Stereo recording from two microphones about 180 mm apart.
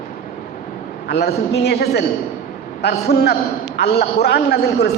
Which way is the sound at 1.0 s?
65° left (ahead or behind).